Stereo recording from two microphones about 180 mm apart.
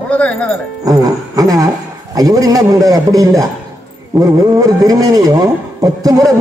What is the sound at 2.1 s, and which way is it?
A man's voice, 20° right (ahead or behind).